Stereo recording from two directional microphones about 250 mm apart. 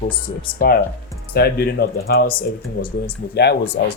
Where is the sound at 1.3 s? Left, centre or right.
Left.